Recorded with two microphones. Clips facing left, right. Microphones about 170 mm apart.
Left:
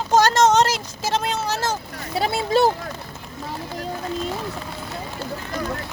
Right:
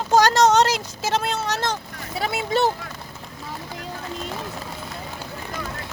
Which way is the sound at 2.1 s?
30° left (ahead or behind).